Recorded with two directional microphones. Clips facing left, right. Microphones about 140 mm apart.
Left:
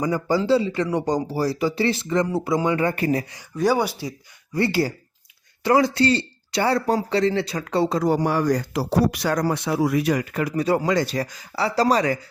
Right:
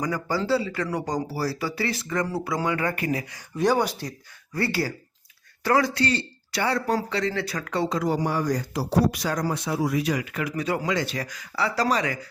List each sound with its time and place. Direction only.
0.0 s speech: 25° left (ahead or behind)
3.6 s speech: 5° left (ahead or behind)
4.5 s speech: 25° left (ahead or behind)
8.1 s speech: 75° left (ahead or behind); by 12.1 s 35° left (ahead or behind)